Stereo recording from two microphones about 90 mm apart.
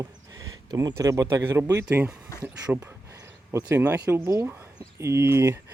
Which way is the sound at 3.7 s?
20° right (ahead or behind).